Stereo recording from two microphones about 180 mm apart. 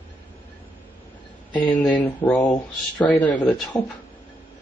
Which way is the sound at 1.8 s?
10° left (ahead or behind).